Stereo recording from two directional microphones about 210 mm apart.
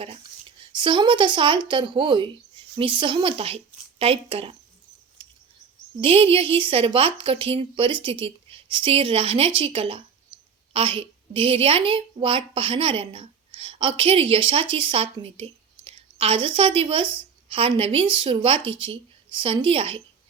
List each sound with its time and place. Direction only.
0.0 s a woman's voice: 25° right (ahead or behind)
6.0 s a woman's voice: 25° right (ahead or behind)